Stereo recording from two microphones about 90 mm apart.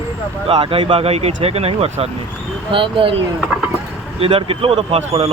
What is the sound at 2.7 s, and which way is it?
Speech, 75° right (ahead or behind).